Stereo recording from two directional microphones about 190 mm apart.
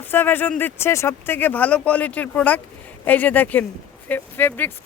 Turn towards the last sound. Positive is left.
turn(degrees=10)  # may be behind; listen again after turning